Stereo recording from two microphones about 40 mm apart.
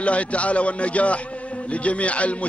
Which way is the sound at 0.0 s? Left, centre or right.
Left.